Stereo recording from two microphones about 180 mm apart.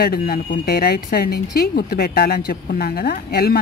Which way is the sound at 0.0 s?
55° left (ahead or behind).